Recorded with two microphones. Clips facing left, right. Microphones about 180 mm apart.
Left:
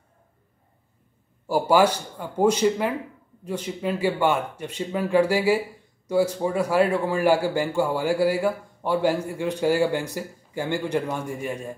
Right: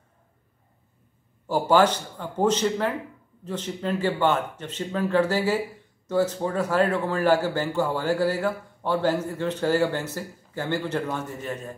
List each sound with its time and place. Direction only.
1.5 s a man's voice: 10° left (ahead or behind)